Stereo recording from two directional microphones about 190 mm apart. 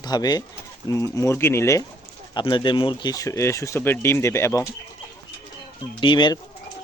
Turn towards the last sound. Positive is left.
turn(degrees=25)  # may be behind; listen again after turning